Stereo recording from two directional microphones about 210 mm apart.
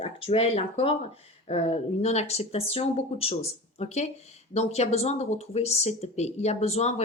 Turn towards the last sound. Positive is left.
turn(degrees=30)  # may be behind; listen again after turning